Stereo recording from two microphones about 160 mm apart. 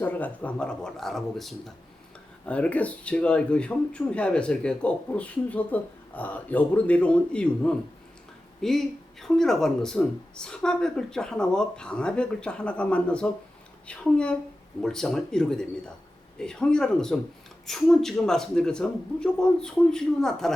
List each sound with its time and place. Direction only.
0.0 s speech: 10° left (ahead or behind)